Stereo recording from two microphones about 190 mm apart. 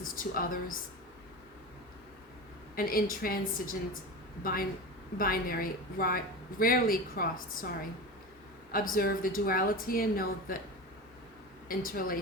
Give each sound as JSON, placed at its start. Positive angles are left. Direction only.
{"t": 0.0, "sound": "a woman's voice", "side_deg": 45}
{"t": 2.7, "sound": "a woman's voice", "side_deg": 50}
{"t": 11.7, "sound": "a woman's voice", "side_deg": 50}